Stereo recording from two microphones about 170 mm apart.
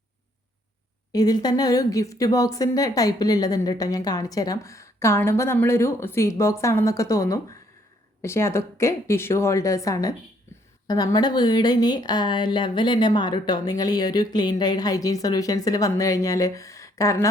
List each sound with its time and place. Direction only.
1.1 s a woman's voice: 25° left (ahead or behind)